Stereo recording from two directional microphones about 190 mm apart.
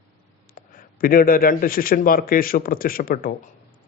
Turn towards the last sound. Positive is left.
turn(degrees=50)  # may be behind; listen again after turning